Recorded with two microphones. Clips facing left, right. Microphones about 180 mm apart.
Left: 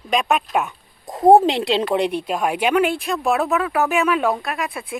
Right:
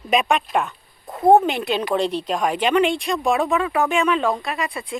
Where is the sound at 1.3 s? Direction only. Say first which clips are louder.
Left 2 dB; 30° left (ahead or behind).